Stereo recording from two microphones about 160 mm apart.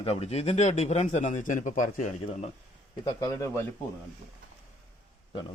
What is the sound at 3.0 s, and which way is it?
Speech, 25° left (ahead or behind).